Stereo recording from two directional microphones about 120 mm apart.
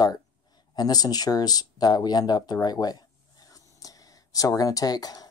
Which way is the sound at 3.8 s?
30° left (ahead or behind).